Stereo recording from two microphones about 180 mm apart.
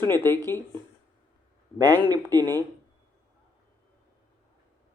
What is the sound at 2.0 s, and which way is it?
Speech, 20° right (ahead or behind).